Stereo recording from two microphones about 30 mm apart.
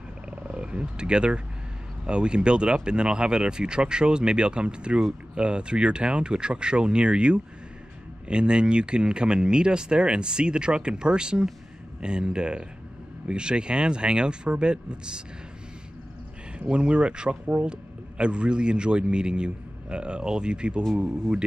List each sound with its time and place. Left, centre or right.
0.5 s roaring cats: right
2.0 s a man's voice: right
16.5 s a man's voice: right